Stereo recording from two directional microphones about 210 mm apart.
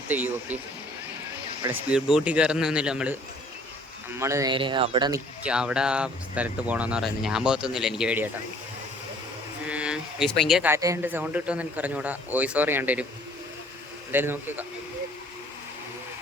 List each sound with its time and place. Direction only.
0.1 s speech: 10° right (ahead or behind)
1.9 s speech: centre (ahead or behind)
4.2 s speech: 15° right (ahead or behind)
5.4 s speech: 5° right (ahead or behind)
9.6 s speech: 5° right (ahead or behind)
14.1 s speech: 10° right (ahead or behind)